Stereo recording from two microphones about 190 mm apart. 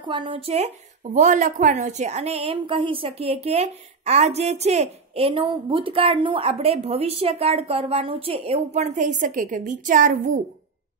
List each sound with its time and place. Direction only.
0.0 s speech: 25° right (ahead or behind); by 10.4 s 45° right (ahead or behind)